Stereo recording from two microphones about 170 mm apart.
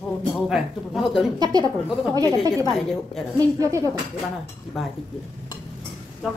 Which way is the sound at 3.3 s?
20° right (ahead or behind).